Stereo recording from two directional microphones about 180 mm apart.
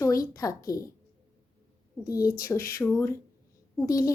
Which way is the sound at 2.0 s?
20° left (ahead or behind).